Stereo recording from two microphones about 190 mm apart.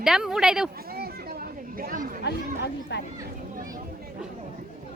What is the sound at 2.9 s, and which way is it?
Speech, 60° left (ahead or behind).